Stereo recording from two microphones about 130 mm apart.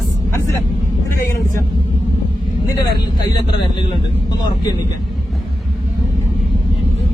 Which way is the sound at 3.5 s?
40° left (ahead or behind).